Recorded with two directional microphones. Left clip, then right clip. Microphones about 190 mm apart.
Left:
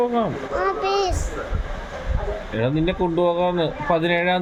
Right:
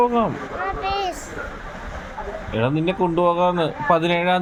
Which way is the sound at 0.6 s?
40° left (ahead or behind).